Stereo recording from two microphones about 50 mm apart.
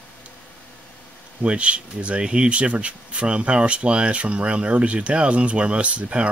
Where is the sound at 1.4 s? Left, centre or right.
Right.